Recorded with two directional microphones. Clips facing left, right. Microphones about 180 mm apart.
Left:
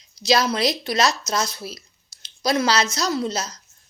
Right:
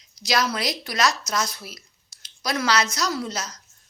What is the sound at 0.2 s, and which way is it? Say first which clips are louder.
Speech: left 5 dB; 25° left (ahead or behind).